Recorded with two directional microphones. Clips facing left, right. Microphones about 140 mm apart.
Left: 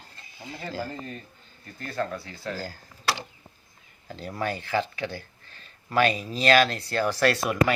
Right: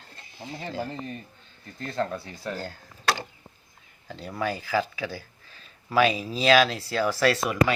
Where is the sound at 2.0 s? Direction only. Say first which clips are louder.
Right 1 dB; 15° right (ahead or behind).